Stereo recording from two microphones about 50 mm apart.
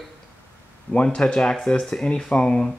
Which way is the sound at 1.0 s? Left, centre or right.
Centre.